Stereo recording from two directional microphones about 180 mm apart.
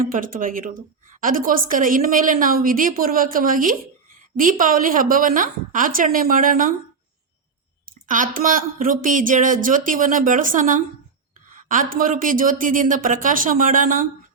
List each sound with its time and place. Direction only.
0.1 s a woman's voice: 50° right (ahead or behind)
7.9 s a woman's voice: 45° right (ahead or behind)